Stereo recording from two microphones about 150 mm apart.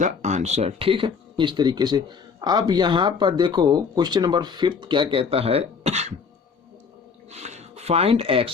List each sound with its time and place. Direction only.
0.0 s speech: 50° right (ahead or behind)
7.3 s speech: 50° right (ahead or behind)